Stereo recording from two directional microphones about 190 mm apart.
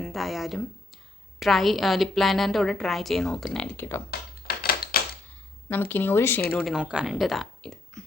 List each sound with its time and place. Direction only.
0.0 s a woman's voice: centre (ahead or behind)
4.4 s a sound: 50° left (ahead or behind)
5.6 s speech: 10° left (ahead or behind)